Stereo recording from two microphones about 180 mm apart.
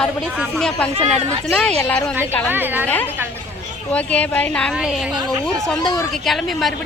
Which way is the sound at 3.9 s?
10° left (ahead or behind).